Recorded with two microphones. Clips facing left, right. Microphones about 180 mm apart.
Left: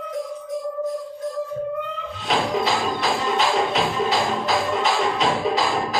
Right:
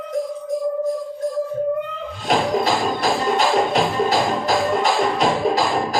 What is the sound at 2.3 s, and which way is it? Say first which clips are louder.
Music: right 3 dB; 40° right (ahead or behind).